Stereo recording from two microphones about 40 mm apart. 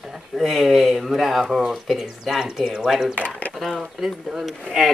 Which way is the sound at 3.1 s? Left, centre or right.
Left.